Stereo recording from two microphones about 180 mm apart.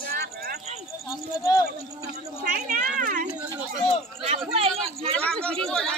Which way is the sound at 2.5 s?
45° right (ahead or behind).